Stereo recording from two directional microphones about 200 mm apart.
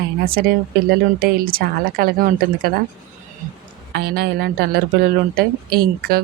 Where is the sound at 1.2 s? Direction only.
45° right (ahead or behind).